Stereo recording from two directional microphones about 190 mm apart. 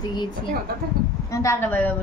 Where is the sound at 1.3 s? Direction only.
15° left (ahead or behind).